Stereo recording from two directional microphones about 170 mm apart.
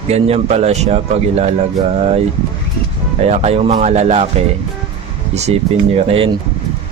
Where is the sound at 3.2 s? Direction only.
40° right (ahead or behind).